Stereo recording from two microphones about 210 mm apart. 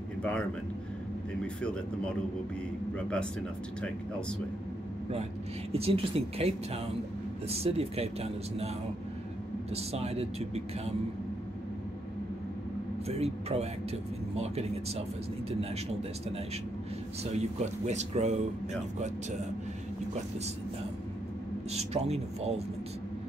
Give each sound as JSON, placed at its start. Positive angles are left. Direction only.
{"t": 0.2, "sound": "a man's voice", "side_deg": 5}
{"t": 3.0, "sound": "speech", "side_deg": 5}
{"t": 5.7, "sound": "speech", "side_deg": -25}
{"t": 9.8, "sound": "speech", "side_deg": -30}
{"t": 13.0, "sound": "speech", "side_deg": -30}
{"t": 17.2, "sound": "speech", "side_deg": -30}
{"t": 21.7, "sound": "speech", "side_deg": -30}